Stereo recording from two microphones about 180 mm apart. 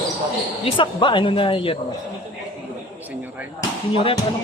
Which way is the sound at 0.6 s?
30° left (ahead or behind).